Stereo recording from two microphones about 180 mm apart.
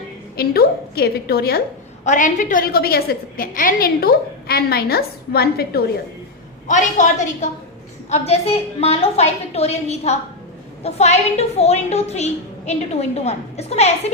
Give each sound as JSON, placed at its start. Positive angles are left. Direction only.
{"t": 0.3, "sound": "a woman's voice", "side_deg": 60}
{"t": 2.0, "sound": "a woman's voice", "side_deg": 45}
{"t": 6.7, "sound": "a woman's voice", "side_deg": 45}